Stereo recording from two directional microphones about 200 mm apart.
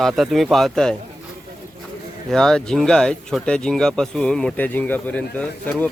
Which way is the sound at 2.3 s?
Centre (ahead or behind).